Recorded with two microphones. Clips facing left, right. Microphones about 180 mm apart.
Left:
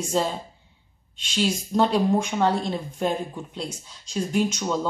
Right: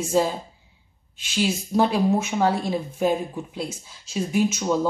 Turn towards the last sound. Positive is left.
turn(degrees=-5)  # may be behind; listen again after turning